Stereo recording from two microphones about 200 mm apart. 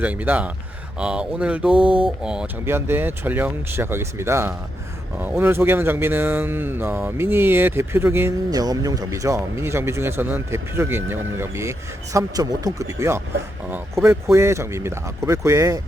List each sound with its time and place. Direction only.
0.0 s speech: 10° right (ahead or behind)
1.7 s mantra: 25° right (ahead or behind)
2.0 s speech: 5° right (ahead or behind)